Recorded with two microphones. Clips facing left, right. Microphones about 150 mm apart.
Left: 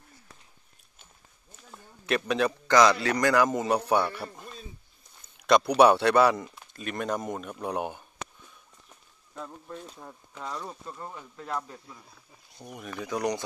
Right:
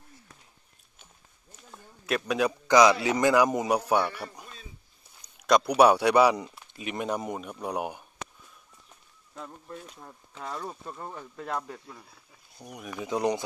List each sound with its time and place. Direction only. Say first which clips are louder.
1.6 s a man's voice: even; centre (ahead or behind)
5.5 s speech: left 1 dB; 5° right (ahead or behind)
9.4 s speech: left 1 dB; 5° right (ahead or behind)
10.5 s speech: right 2 dB; 10° right (ahead or behind)
11.3 s speech: right 1 dB; 65° right (ahead or behind)
12.8 s speech: right 1 dB; 15° right (ahead or behind)